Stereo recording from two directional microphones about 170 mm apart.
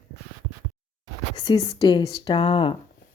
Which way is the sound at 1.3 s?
25° left (ahead or behind).